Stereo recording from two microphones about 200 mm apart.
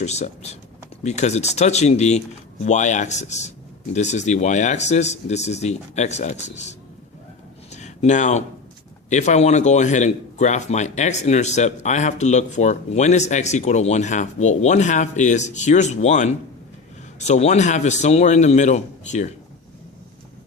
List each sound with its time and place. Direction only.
0.0 s speech: 35° left (ahead or behind)
7.7 s a sound: 35° left (ahead or behind)
9.0 s speech: 35° left (ahead or behind)